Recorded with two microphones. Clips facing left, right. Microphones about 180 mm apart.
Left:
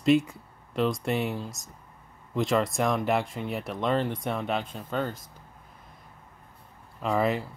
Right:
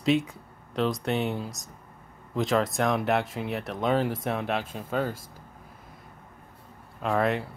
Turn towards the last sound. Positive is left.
turn(degrees=0)  # may be behind; listen again after turning